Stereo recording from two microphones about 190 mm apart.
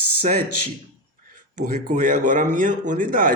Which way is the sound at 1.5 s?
40° right (ahead or behind).